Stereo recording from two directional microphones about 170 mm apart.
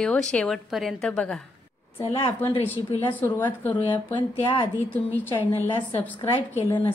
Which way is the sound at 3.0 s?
10° left (ahead or behind).